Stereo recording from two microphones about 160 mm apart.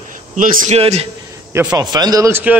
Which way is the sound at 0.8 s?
40° right (ahead or behind).